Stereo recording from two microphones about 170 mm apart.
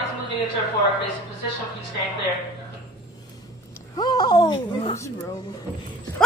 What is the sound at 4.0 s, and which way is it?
Speech, 25° left (ahead or behind).